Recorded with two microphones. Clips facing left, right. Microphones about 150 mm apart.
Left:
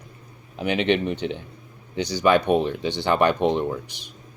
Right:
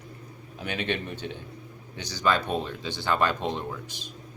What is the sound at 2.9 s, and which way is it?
Speech, 20° left (ahead or behind).